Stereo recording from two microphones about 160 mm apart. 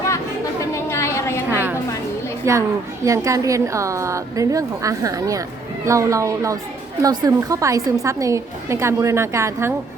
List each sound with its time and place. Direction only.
0.6 s a sound: 20° left (ahead or behind)
1.5 s music: 15° right (ahead or behind)
2.5 s a woman's voice: 20° right (ahead or behind)